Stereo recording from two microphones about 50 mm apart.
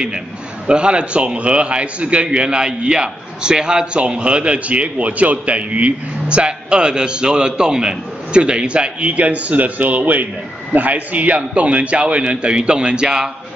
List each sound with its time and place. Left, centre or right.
0.7 s a man's voice: right